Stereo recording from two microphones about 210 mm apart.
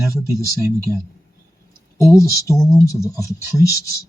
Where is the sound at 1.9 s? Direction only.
15° left (ahead or behind).